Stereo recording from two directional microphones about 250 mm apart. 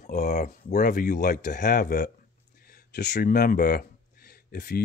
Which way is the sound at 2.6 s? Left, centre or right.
Left.